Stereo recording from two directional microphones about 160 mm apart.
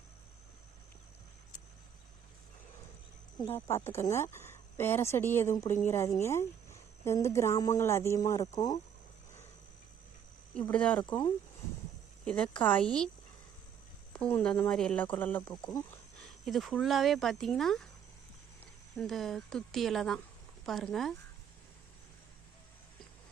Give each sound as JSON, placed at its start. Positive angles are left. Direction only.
{"t": 3.8, "sound": "speech", "side_deg": 15}
{"t": 10.5, "sound": "speech", "side_deg": 10}
{"t": 12.2, "sound": "speech", "side_deg": 5}
{"t": 14.1, "sound": "speech", "side_deg": 10}
{"t": 18.9, "sound": "speech", "side_deg": 0}